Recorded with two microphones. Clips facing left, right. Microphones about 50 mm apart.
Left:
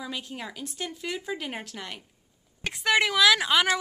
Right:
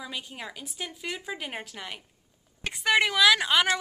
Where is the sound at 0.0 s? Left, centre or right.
Centre.